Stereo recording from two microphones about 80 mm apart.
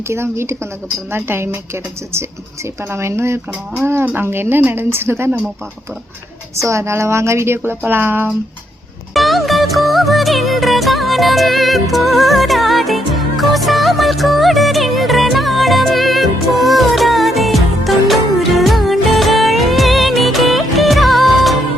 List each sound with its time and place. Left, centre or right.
0.1 s a woman's voice: right
6.7 s a woman's voice: right
9.1 s music: centre